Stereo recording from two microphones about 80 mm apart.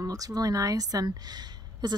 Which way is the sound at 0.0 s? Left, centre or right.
Right.